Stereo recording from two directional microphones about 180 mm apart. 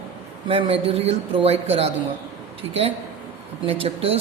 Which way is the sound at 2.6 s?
35° right (ahead or behind).